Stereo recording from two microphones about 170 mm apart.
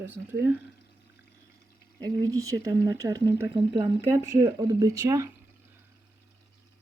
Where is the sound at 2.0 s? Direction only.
20° right (ahead or behind).